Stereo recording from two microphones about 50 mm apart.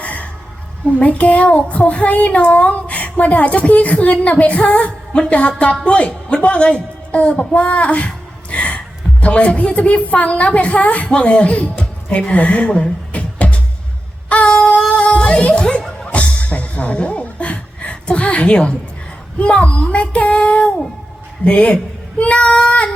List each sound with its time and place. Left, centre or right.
0.0 s music: left
0.9 s a child's voice: left
14.3 s a sound: left
14.8 s music: left
19.4 s a child's voice: left
22.2 s child singing: left